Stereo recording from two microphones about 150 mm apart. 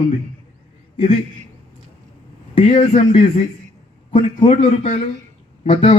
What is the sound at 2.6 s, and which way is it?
Speech, 50° left (ahead or behind).